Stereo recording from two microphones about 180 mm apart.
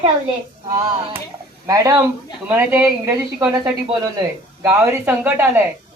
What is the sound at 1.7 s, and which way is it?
A man's voice, 20° right (ahead or behind).